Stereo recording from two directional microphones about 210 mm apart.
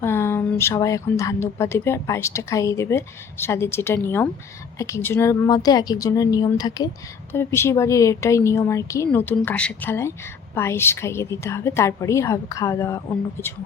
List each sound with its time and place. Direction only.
0.0 s speech: 10° left (ahead or behind)